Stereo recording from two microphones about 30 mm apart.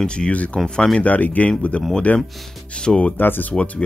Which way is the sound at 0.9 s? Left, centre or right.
Left.